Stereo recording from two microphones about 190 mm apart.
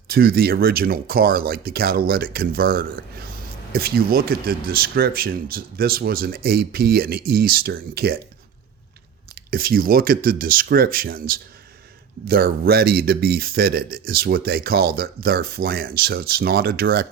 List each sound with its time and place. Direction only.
0.1 s speech: 55° right (ahead or behind)
9.3 s speech: 50° right (ahead or behind)